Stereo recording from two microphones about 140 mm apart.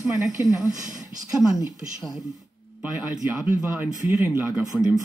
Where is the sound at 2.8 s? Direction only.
10° right (ahead or behind).